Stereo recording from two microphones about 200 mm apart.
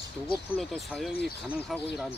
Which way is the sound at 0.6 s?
Centre (ahead or behind).